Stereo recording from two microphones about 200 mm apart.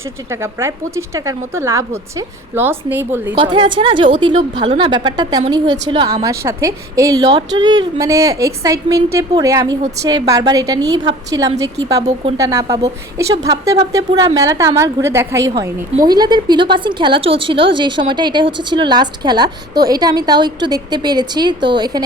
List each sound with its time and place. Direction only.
0.3 s a woman's voice: 15° right (ahead or behind)
3.3 s a woman's voice: 25° right (ahead or behind)